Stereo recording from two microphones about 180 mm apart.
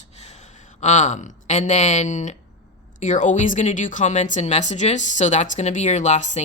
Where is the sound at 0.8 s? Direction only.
40° left (ahead or behind).